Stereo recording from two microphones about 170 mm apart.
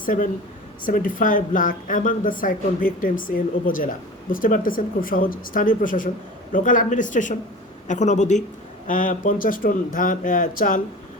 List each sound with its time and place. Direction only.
0.0 s speech: 55° left (ahead or behind)